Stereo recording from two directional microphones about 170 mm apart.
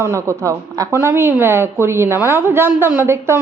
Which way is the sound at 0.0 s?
15° right (ahead or behind).